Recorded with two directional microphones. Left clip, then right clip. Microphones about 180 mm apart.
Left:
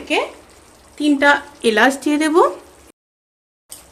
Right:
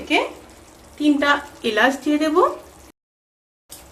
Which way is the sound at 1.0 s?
60° left (ahead or behind).